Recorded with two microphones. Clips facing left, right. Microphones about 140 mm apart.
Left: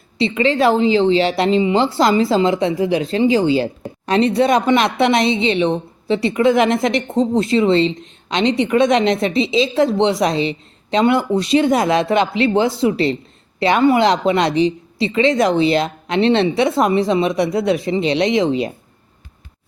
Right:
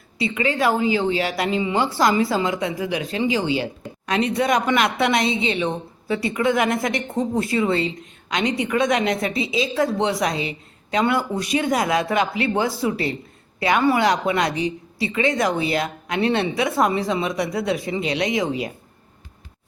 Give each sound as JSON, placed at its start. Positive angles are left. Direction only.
{"t": 0.2, "sound": "a woman's voice", "side_deg": 30}